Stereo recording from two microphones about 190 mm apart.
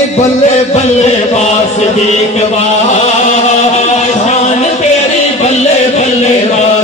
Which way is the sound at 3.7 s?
35° left (ahead or behind).